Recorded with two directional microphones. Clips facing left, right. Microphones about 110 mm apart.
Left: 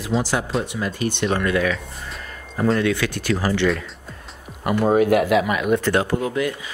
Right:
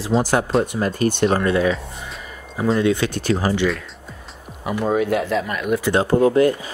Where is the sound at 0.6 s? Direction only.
45° right (ahead or behind).